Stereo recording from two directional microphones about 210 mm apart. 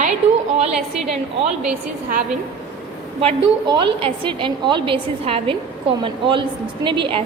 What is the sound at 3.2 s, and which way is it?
A woman's voice, 25° right (ahead or behind).